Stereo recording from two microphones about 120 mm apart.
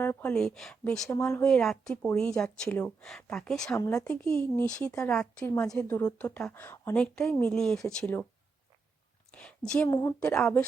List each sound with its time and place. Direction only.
0.0 s speech: 20° left (ahead or behind)
0.3 s speech: 5° left (ahead or behind)
1.1 s speech: 20° left (ahead or behind)
1.5 s speech: 5° left (ahead or behind)
3.8 s speech: 25° left (ahead or behind)
4.0 s speech: 5° left (ahead or behind)
7.0 s speech: 5° left (ahead or behind)
9.3 s a woman's voice: 10° left (ahead or behind)
9.9 s speech: 30° left (ahead or behind)
10.2 s speech: 10° left (ahead or behind)